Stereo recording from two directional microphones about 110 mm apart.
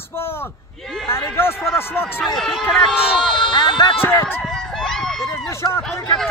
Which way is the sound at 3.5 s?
45° left (ahead or behind).